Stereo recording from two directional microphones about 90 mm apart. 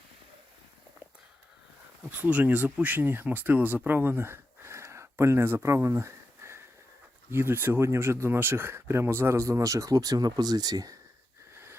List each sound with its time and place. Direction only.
2.0 s speech: 20° right (ahead or behind); by 10.9 s 45° right (ahead or behind)
11.5 s wheeze: 30° right (ahead or behind)